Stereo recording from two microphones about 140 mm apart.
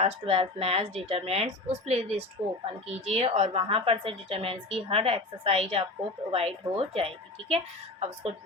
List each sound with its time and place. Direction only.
0.0 s a woman's voice: 45° right (ahead or behind)